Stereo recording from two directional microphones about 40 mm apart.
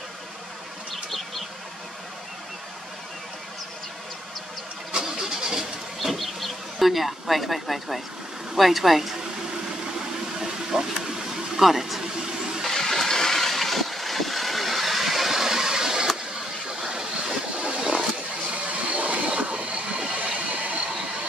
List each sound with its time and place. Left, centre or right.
4.9 s vehicle: centre
6.1 s bee: centre
8.5 s speech: centre
10.4 s a sound: centre
11.5 s speech: centre
12.6 s vehicle: centre
16.8 s a sound: centre
17.6 s vehicle: right
18.5 s a sound: right